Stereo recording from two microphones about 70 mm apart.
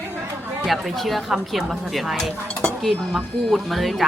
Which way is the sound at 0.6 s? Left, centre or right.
Centre.